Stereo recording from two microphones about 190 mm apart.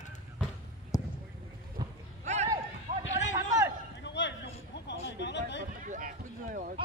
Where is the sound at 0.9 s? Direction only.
20° left (ahead or behind).